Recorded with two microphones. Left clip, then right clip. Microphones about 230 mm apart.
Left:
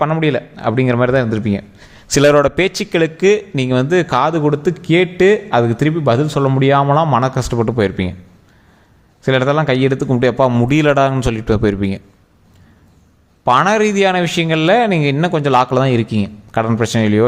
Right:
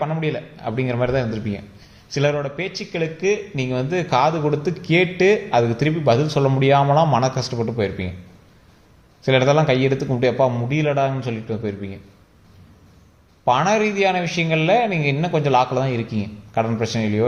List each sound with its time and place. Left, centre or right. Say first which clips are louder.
0.0 s a man's voice: left 8 dB; left
2.1 s a man's voice: left 11 dB; left
9.2 s a man's voice: left 2 dB; left
13.4 s a man's voice: left 5 dB; left